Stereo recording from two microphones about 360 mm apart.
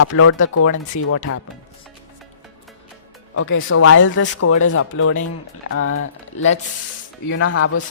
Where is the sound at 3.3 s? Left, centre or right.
Left.